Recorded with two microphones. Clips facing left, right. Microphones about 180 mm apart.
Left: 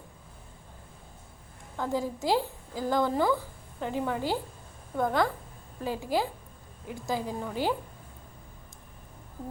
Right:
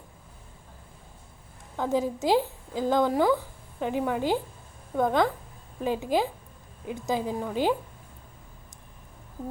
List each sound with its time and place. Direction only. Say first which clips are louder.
1.8 s a woman's voice: right 4 dB; 20° right (ahead or behind)